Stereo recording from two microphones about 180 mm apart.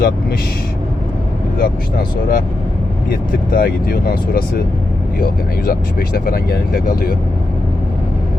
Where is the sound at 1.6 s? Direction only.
55° left (ahead or behind).